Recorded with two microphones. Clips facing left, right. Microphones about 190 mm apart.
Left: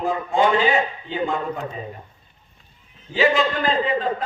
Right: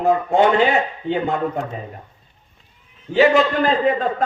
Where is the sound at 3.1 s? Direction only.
60° right (ahead or behind).